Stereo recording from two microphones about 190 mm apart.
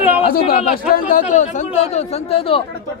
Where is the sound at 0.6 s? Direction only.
40° left (ahead or behind).